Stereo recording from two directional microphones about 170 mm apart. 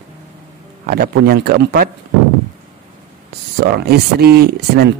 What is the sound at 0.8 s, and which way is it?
A man's voice, 60° right (ahead or behind).